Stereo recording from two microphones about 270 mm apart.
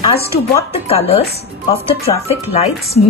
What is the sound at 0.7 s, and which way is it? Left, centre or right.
Speech, left.